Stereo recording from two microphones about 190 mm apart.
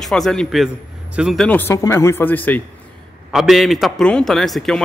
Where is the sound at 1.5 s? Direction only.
10° left (ahead or behind).